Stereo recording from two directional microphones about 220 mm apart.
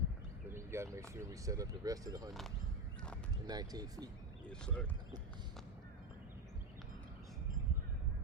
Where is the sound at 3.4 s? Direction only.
15° right (ahead or behind).